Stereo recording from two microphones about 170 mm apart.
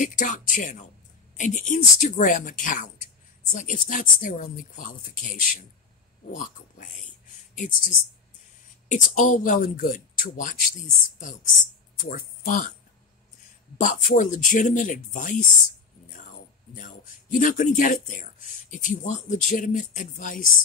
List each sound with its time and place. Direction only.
0.0 s speech: 50° left (ahead or behind)
13.7 s speech: 50° left (ahead or behind)
16.7 s speech: 50° left (ahead or behind)